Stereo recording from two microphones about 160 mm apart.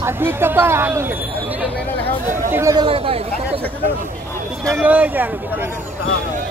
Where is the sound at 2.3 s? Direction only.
15° right (ahead or behind).